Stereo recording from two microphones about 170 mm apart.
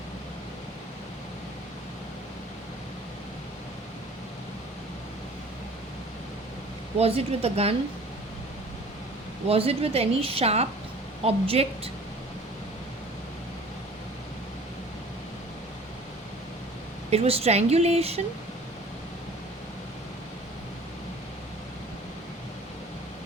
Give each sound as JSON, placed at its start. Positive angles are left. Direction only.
{"t": 7.0, "sound": "a woman's voice", "side_deg": -35}
{"t": 9.5, "sound": "a woman's voice", "side_deg": -35}
{"t": 17.1, "sound": "a woman's voice", "side_deg": -35}